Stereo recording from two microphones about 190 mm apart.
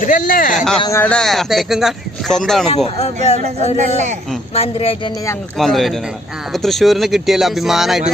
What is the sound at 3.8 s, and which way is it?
Speech, 40° right (ahead or behind).